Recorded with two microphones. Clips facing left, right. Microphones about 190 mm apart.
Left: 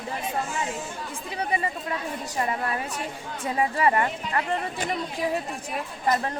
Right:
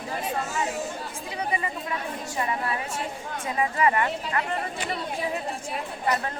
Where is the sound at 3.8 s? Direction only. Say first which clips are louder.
Right 1 dB; 35° left (ahead or behind).